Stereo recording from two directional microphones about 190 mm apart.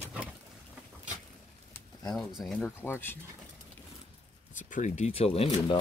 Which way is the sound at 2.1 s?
Centre (ahead or behind).